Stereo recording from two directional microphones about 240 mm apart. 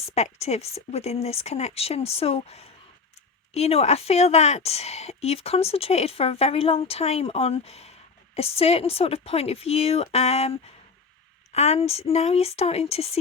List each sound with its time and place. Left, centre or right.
0.0 s a woman's voice: left